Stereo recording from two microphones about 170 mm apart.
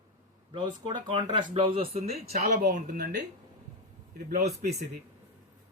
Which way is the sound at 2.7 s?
50° right (ahead or behind).